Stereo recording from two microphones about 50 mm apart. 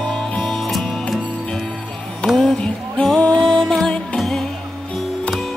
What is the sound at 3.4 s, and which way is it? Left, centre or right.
Music, centre.